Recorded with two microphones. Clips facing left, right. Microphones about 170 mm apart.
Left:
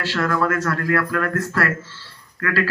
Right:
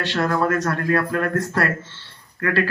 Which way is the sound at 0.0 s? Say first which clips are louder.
Right 1 dB; 25° right (ahead or behind).